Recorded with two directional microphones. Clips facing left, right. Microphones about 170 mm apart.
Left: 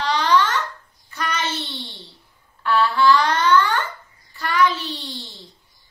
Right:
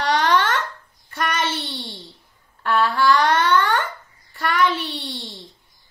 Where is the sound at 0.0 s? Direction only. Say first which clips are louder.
Even; 50° right (ahead or behind).